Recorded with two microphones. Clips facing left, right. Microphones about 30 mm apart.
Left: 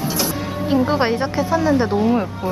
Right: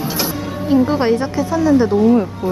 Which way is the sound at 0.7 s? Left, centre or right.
Centre.